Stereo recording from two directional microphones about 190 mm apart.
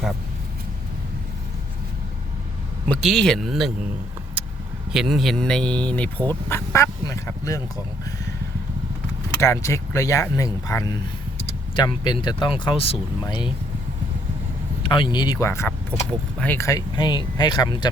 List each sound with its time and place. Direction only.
3.0 s speech: centre (ahead or behind)
4.9 s speech: centre (ahead or behind); by 7.6 s 20° left (ahead or behind)
9.4 s speech: 15° left (ahead or behind)
14.8 s speech: 25° left (ahead or behind)